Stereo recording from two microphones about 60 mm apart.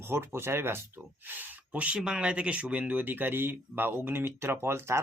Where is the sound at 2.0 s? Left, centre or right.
Centre.